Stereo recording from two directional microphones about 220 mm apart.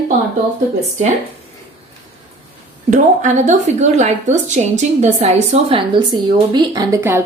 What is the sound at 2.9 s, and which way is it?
A woman's voice, 35° right (ahead or behind).